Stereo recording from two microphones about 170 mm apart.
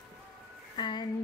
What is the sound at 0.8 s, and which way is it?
Speech, 25° left (ahead or behind).